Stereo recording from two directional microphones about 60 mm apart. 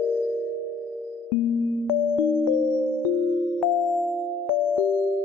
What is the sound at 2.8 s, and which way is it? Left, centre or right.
Music, left.